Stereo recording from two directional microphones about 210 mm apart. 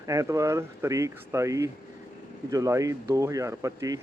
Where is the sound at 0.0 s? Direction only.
15° right (ahead or behind).